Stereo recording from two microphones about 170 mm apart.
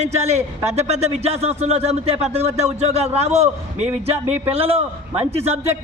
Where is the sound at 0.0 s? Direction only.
40° right (ahead or behind).